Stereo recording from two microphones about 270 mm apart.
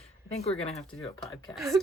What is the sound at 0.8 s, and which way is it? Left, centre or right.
Speech, centre.